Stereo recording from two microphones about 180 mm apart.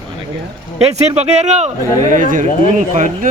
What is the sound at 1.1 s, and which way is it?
Speech, 40° right (ahead or behind).